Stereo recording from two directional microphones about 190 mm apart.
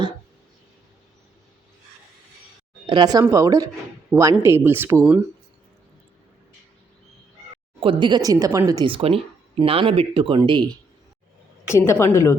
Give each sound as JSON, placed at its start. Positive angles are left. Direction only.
{"t": 2.8, "sound": "a woman's voice", "side_deg": -25}
{"t": 7.8, "sound": "a woman's voice", "side_deg": -25}
{"t": 11.7, "sound": "a woman's voice", "side_deg": 15}